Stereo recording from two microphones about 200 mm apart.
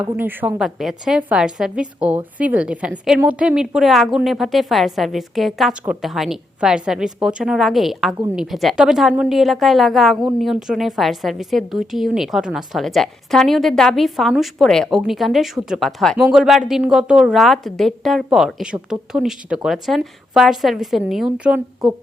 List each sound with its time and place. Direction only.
0.0 s a woman's voice: 10° right (ahead or behind)